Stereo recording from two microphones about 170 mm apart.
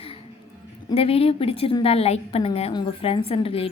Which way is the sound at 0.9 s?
35° left (ahead or behind).